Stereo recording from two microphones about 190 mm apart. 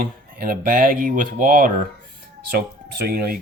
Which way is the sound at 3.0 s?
50° right (ahead or behind).